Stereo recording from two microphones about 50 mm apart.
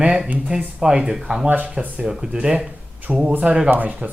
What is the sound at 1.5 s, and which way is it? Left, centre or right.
Speech, right.